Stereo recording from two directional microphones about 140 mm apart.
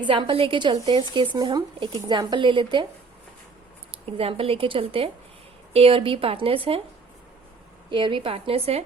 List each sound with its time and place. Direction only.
0.0 s speech: 35° right (ahead or behind)
3.9 s speech: 40° right (ahead or behind)
7.9 s speech: 35° right (ahead or behind)